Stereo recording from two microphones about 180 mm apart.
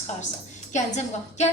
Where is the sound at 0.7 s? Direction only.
40° left (ahead or behind).